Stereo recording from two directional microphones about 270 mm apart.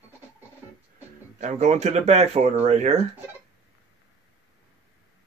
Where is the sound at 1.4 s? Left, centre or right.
Right.